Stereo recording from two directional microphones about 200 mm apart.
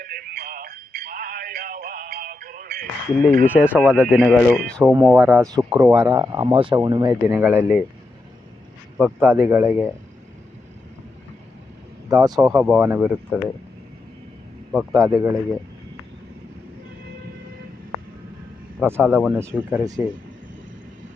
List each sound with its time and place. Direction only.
0.0 s a sound: 45° right (ahead or behind)
3.4 s speech: 10° right (ahead or behind)
4.9 s speech: 10° right (ahead or behind)
9.0 s speech: 10° right (ahead or behind)
12.0 s speech: 20° right (ahead or behind)
14.7 s speech: 10° right (ahead or behind)
18.8 s speech: 10° right (ahead or behind)